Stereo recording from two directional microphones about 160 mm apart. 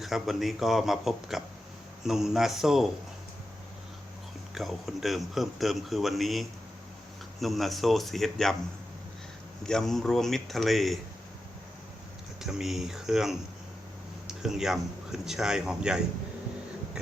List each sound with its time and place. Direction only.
0.0 s speech: centre (ahead or behind)
4.5 s speech: centre (ahead or behind)
9.6 s speech: 5° left (ahead or behind)
12.4 s speech: 5° right (ahead or behind)